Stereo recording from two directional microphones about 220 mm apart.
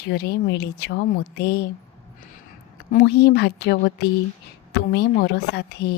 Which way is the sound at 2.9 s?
50° left (ahead or behind).